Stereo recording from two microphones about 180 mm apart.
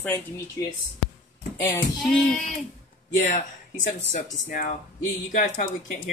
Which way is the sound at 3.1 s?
40° left (ahead or behind).